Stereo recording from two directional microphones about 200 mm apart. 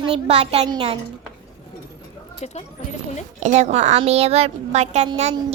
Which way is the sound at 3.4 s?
35° right (ahead or behind).